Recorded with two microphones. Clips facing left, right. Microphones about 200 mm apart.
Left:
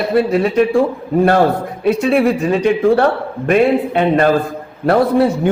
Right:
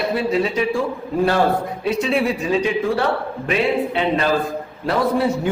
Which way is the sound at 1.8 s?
55° left (ahead or behind).